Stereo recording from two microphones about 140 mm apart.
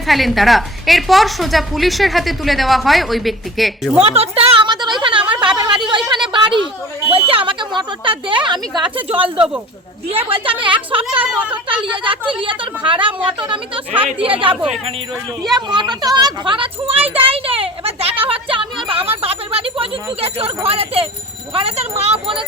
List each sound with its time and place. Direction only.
0.1 s a woman's voice: centre (ahead or behind)
4.0 s a woman's voice: 45° right (ahead or behind)
11.2 s a woman's voice: 10° right (ahead or behind)
11.5 s a woman's voice: 35° right (ahead or behind)
15.5 s a woman's voice: 30° right (ahead or behind)